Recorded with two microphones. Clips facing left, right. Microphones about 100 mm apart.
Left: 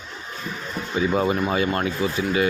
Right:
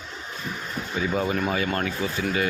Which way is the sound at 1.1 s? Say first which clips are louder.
Left 3 dB; 30° left (ahead or behind).